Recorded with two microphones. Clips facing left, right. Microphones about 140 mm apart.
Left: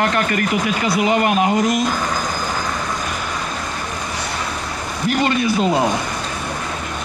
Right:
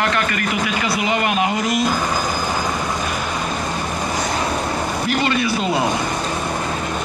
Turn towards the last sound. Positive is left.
turn(degrees=45)  # may be behind; listen again after turning